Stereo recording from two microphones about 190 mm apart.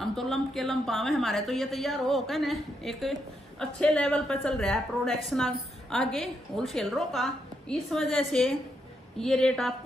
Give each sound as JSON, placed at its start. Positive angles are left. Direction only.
{"t": 0.0, "sound": "a woman's voice", "side_deg": 0}